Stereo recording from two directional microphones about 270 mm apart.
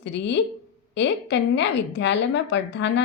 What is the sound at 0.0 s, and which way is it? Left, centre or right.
A woman's voice, left.